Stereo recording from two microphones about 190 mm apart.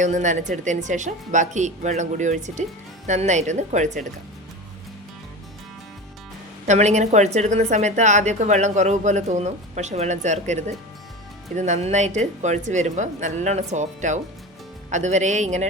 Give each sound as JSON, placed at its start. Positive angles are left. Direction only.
{"t": 0.0, "sound": "speech", "side_deg": -40}
{"t": 6.7, "sound": "speech", "side_deg": -40}